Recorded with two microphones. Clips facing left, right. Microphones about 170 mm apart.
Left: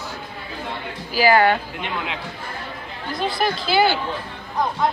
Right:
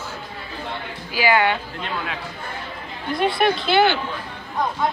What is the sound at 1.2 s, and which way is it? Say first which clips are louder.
Speech: left 3 dB; 40° left (ahead or behind).